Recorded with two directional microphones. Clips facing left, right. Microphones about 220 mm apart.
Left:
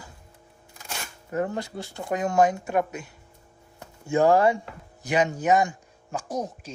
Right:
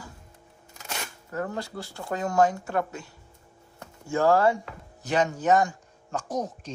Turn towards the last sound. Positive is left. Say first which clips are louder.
# even
turn(degrees=10)  # may be behind; listen again after turning